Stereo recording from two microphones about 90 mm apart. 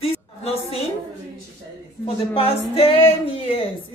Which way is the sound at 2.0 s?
90° left.